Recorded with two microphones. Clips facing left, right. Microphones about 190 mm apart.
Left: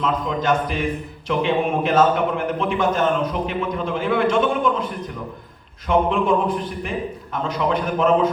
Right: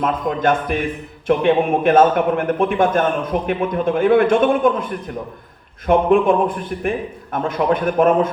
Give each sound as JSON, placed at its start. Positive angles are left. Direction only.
{"t": 0.0, "sound": "a man's voice", "side_deg": -55}